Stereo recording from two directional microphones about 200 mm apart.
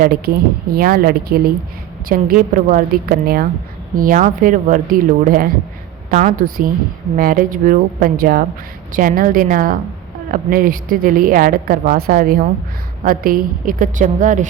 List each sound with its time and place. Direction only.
0.0 s a woman's voice: 50° right (ahead or behind)